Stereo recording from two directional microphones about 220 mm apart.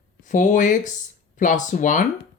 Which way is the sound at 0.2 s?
35° left (ahead or behind).